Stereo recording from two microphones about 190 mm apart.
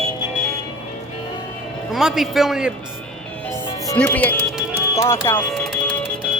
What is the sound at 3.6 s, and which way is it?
Music, 20° left (ahead or behind).